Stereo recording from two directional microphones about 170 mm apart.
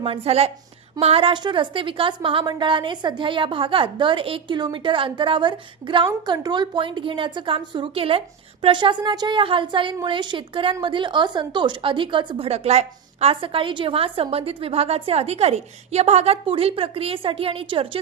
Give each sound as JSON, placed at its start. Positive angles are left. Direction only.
{"t": 0.0, "sound": "a woman's voice", "side_deg": -35}